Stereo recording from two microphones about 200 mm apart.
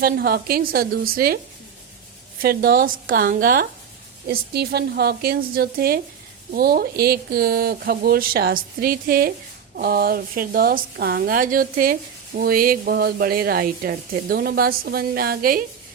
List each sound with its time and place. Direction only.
0.0 s a woman's voice: 50° right (ahead or behind)
2.4 s a woman's voice: 50° right (ahead or behind)